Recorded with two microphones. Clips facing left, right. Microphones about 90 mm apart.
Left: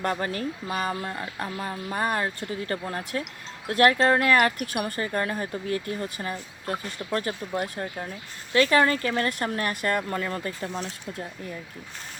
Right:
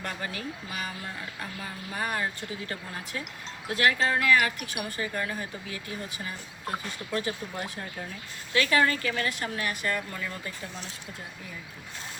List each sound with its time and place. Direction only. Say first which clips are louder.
0.0 s speech: left 7 dB; 40° left (ahead or behind)
8.5 s speech: left 4 dB; 35° left (ahead or behind)